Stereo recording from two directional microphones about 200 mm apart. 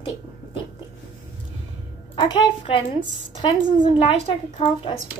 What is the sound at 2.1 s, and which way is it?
Speech, 25° left (ahead or behind).